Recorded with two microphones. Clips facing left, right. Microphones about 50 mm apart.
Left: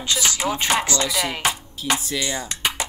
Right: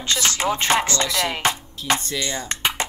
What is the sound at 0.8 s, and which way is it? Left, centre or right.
Music, centre.